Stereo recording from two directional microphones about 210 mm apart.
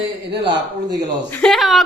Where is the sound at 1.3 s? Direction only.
5° left (ahead or behind).